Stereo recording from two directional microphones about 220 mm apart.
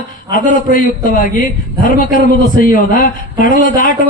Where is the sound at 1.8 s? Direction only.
40° left (ahead or behind).